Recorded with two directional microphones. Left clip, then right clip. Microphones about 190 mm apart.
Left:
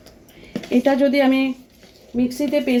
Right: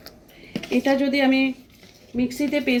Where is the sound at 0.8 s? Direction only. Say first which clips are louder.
Left 4 dB; 25° left (ahead or behind).